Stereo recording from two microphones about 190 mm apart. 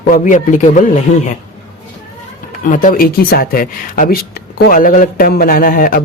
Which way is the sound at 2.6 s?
45° left (ahead or behind).